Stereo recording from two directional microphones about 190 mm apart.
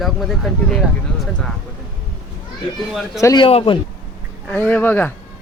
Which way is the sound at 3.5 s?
30° left (ahead or behind).